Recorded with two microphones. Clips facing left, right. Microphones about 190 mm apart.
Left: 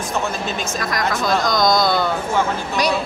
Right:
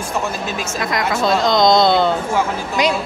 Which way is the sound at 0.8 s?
25° right (ahead or behind).